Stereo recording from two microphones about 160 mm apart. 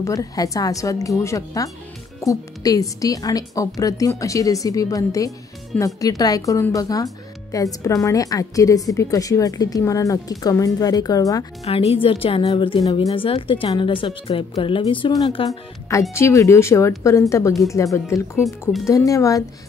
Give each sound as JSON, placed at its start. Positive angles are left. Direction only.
{"t": 0.0, "sound": "a woman's voice", "side_deg": 20}
{"t": 11.6, "sound": "a woman's voice", "side_deg": 40}